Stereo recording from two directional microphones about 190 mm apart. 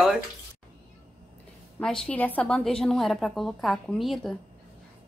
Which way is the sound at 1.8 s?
5° left (ahead or behind).